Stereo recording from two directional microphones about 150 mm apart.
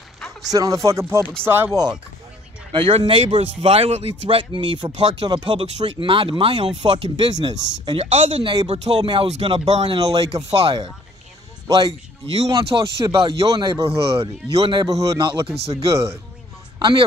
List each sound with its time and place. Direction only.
0.5 s speech: 25° right (ahead or behind)
2.7 s speech: 35° right (ahead or behind)
11.6 s speech: 30° right (ahead or behind)
15.4 s speech: 45° right (ahead or behind)